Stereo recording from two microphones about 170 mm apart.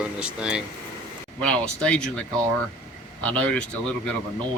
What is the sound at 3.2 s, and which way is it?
Speech, 5° left (ahead or behind).